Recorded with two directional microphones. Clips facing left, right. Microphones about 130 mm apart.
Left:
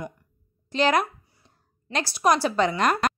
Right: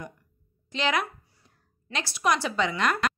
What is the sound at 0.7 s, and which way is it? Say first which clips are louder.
A woman's voice: left 6 dB; 40° left (ahead or behind).